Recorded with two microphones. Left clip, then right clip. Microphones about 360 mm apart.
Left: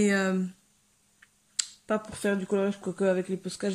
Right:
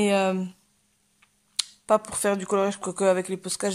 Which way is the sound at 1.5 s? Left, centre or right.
Centre.